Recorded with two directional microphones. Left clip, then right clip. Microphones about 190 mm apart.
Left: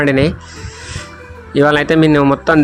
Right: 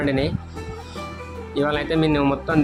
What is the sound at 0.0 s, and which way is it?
Speech, 35° left (ahead or behind).